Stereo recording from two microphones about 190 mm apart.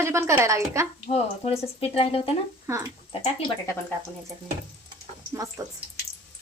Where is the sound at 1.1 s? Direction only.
35° left (ahead or behind).